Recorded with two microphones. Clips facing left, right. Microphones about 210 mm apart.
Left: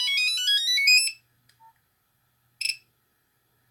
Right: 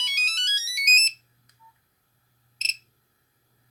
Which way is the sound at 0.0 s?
10° left (ahead or behind).